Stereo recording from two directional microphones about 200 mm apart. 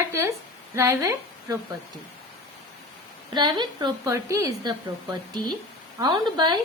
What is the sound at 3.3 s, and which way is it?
A woman's voice, 20° right (ahead or behind).